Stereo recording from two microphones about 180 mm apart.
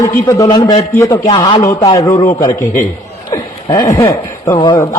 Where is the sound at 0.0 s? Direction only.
20° left (ahead or behind).